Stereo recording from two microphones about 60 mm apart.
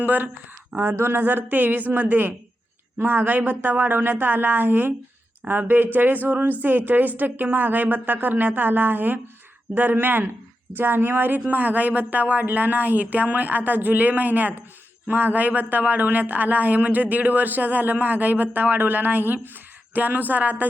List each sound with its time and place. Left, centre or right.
0.0 s a woman's voice: right